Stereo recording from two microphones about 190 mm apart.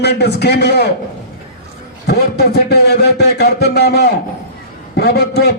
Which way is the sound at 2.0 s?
55° left (ahead or behind).